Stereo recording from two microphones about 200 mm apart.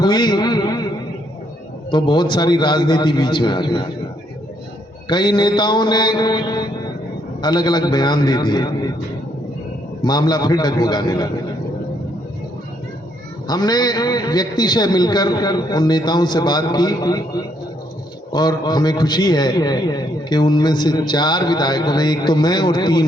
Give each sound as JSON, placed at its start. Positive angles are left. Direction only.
{"t": 0.0, "sound": "a sound", "side_deg": 20}
{"t": 1.9, "sound": "a man's voice", "side_deg": 20}
{"t": 5.0, "sound": "a man's voice", "side_deg": 20}
{"t": 10.0, "sound": "a man's voice", "side_deg": 20}
{"t": 13.5, "sound": "a man's voice", "side_deg": 20}